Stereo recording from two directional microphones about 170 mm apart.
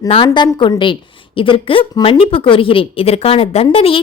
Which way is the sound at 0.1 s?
30° left (ahead or behind).